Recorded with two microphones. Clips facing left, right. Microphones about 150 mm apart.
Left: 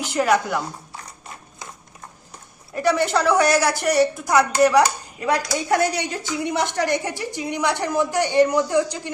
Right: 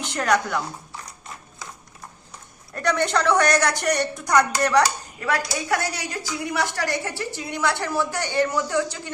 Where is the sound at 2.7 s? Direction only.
10° left (ahead or behind).